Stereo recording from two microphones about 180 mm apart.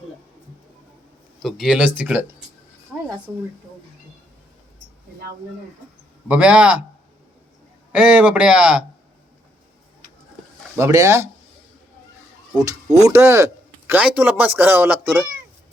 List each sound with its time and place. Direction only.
1.4 s speech: centre (ahead or behind)
2.9 s a sound: 5° right (ahead or behind)
6.2 s a man's voice: 5° right (ahead or behind)
7.9 s a man's voice: 5° right (ahead or behind)
10.8 s a man's voice: 15° right (ahead or behind)
12.5 s speech: 20° right (ahead or behind)